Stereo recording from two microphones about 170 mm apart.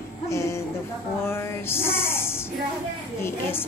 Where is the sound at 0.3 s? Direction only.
15° left (ahead or behind).